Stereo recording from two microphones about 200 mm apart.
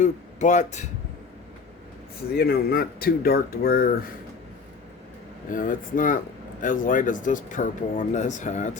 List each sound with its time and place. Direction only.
0.0 s speech: 35° left (ahead or behind)
2.4 s speech: 50° left (ahead or behind)
5.5 s speech: 40° left (ahead or behind)